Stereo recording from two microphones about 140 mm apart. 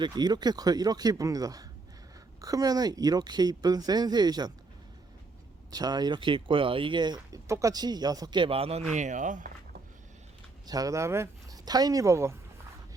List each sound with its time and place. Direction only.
0.0 s speech: 30° right (ahead or behind)
5.7 s speech: 30° right (ahead or behind); by 8.8 s 45° right (ahead or behind)
8.9 s speech: 60° right (ahead or behind)
10.7 s speech: 25° right (ahead or behind)